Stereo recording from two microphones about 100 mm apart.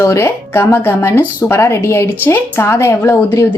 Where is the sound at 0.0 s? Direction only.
30° left (ahead or behind).